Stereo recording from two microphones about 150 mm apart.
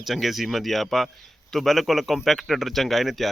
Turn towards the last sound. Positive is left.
turn(degrees=0)  # may be behind; listen again after turning